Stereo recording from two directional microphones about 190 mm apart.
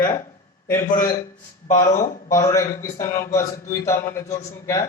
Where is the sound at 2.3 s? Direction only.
15° left (ahead or behind).